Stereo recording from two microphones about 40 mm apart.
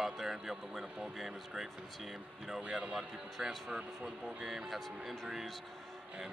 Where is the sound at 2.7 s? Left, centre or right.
Centre.